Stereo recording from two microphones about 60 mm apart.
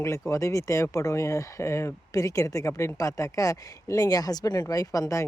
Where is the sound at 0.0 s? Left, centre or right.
Left.